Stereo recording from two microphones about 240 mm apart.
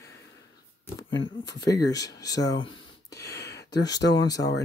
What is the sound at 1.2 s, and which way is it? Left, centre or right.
Speech, centre.